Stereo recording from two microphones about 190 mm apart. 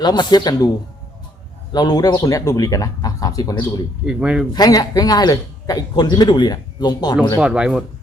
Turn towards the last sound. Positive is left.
turn(degrees=-5)  # may be behind; listen again after turning